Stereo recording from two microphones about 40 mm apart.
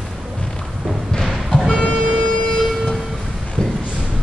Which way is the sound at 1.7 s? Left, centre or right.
Left.